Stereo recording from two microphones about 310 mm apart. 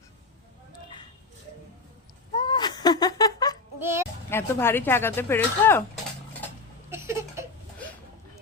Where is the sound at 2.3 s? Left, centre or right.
Centre.